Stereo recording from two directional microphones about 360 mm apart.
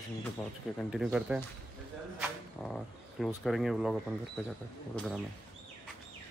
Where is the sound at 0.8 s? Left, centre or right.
Centre.